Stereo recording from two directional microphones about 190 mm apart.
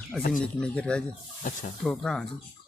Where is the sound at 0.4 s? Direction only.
5° left (ahead or behind).